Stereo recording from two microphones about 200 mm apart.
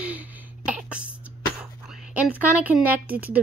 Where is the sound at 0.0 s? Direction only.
5° right (ahead or behind).